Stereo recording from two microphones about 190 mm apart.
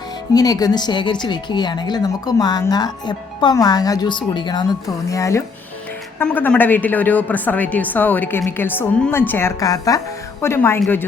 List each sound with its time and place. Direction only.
0.3 s a woman's voice: 20° left (ahead or behind)